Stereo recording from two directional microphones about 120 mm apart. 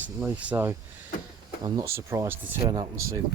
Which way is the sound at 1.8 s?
20° right (ahead or behind).